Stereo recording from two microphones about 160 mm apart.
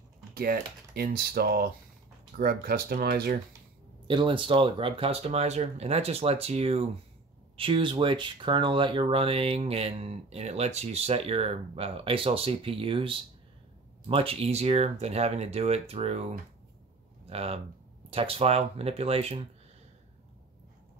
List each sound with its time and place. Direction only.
0.3 s speech: 70° right (ahead or behind)
4.1 s speech: 30° right (ahead or behind)